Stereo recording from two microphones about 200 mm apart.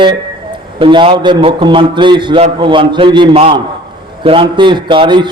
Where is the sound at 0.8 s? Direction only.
25° right (ahead or behind).